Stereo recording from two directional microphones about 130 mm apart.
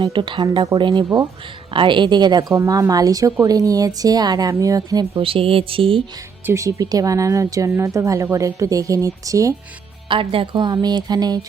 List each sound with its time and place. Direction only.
0.0 s a woman's voice: 40° right (ahead or behind)
5.2 s speech: 45° right (ahead or behind)
6.4 s a woman's voice: 20° right (ahead or behind)
10.1 s speech: 40° right (ahead or behind)